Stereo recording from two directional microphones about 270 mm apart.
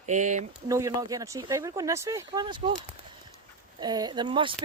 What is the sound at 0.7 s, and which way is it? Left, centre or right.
Speech, centre.